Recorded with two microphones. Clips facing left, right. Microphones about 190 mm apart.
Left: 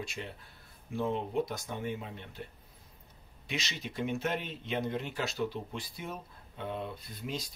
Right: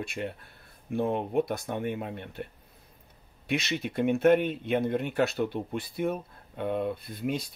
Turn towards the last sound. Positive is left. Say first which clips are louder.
# right 8 dB
turn(degrees=-60)  # may be behind; listen again after turning